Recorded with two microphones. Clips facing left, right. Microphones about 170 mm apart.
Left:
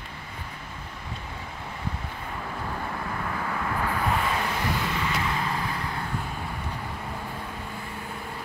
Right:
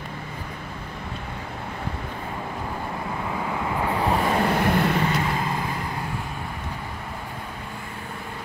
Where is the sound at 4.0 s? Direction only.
35° right (ahead or behind); by 5.1 s 55° right (ahead or behind).